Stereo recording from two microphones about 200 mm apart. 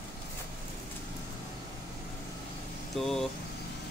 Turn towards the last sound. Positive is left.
turn(degrees=0)  # may be behind; listen again after turning